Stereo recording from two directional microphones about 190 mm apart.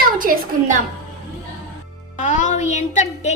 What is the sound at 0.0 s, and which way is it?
Speech, 50° right (ahead or behind).